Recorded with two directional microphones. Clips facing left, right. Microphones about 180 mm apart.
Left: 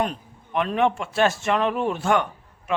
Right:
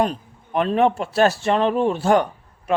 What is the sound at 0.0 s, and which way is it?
A man's voice, 35° right (ahead or behind).